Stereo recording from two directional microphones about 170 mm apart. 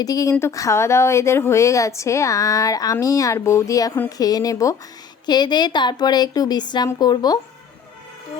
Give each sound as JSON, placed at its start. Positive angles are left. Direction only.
{"t": 0.0, "sound": "a woman's voice", "side_deg": 20}